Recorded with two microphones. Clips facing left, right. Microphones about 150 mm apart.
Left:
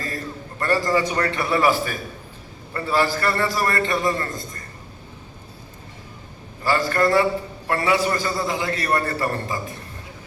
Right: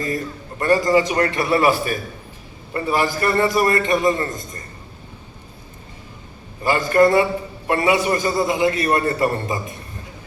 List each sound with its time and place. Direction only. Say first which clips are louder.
0.6 s a man's voice: right 4 dB; 20° right (ahead or behind)
2.7 s a man's voice: right 1 dB; 20° right (ahead or behind)
6.6 s a man's voice: right 5 dB; 20° right (ahead or behind)